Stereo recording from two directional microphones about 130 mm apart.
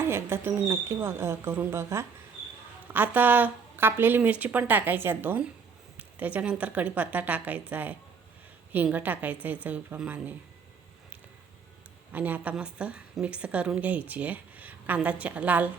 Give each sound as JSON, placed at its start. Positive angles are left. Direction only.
{"t": 0.0, "sound": "a woman's voice", "side_deg": -20}
{"t": 12.1, "sound": "a woman's voice", "side_deg": -10}